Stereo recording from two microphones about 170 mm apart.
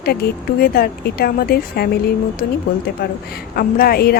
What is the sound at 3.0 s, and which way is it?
A woman's voice, 60° left (ahead or behind).